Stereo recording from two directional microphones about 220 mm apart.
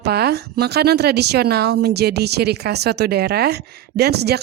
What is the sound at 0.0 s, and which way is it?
A woman's voice, 45° right (ahead or behind).